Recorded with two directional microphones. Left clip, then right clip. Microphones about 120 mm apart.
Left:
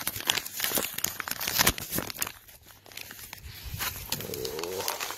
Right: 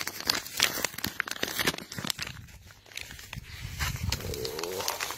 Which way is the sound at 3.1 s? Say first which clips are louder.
Right 1 dB; 40° left (ahead or behind).